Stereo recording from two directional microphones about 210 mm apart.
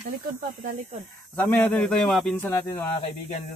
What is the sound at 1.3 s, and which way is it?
Speech, 5° left (ahead or behind).